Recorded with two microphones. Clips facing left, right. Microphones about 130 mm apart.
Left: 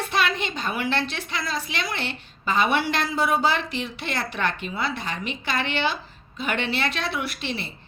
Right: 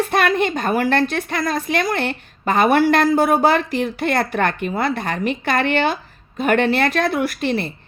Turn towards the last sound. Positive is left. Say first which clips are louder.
# right 10 dB
turn(degrees=-50)  # may be behind; listen again after turning